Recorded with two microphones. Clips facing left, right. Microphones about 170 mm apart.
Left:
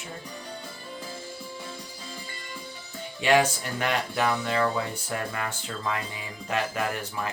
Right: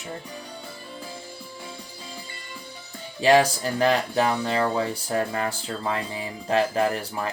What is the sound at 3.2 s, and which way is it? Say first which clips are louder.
Speech: right 4 dB; 35° right (ahead or behind).